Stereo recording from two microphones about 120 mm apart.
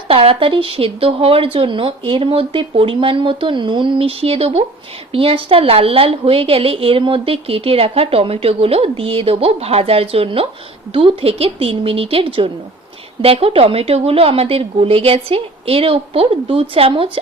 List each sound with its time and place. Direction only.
0.1 s a woman's voice: 50° right (ahead or behind)